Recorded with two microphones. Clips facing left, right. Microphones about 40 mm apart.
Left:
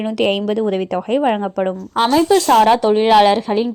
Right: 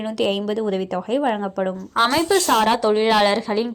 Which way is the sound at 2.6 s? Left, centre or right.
Centre.